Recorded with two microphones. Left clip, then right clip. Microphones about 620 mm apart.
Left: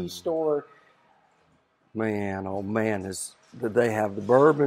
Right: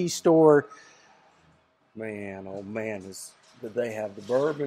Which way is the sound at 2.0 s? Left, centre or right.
Left.